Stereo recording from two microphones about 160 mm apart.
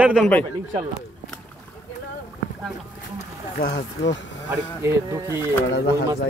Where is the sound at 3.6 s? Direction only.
80° left.